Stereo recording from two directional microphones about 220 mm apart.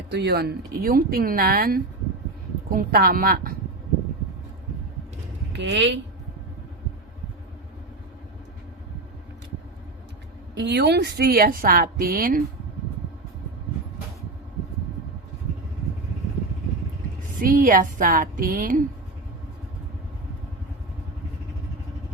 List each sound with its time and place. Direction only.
0.1 s a woman's voice: 50° right (ahead or behind)
5.5 s speech: 55° right (ahead or behind)
10.5 s a woman's voice: 50° right (ahead or behind)
17.4 s a woman's voice: 40° right (ahead or behind)